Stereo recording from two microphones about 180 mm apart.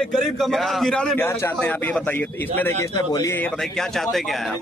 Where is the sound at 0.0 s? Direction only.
Centre (ahead or behind).